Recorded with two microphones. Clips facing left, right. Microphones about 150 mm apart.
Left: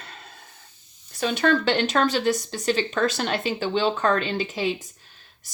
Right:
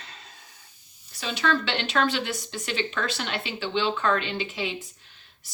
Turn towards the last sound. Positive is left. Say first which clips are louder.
# left 2 dB
turn(degrees=45)  # may be behind; listen again after turning